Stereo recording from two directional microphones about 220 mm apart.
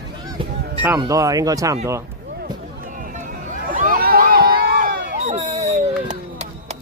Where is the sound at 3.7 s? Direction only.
40° right (ahead or behind).